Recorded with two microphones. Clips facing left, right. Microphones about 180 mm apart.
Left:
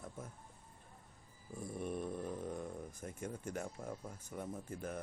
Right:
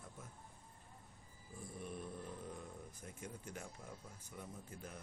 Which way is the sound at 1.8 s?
50° left (ahead or behind).